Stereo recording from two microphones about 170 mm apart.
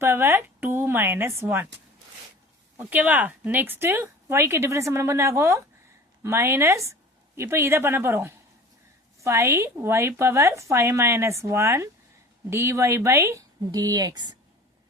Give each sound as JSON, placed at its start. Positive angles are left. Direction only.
{"t": 0.0, "sound": "speech", "side_deg": -15}
{"t": 2.7, "sound": "speech", "side_deg": -10}